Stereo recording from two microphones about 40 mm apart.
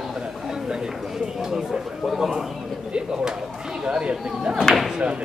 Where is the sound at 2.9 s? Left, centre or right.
Centre.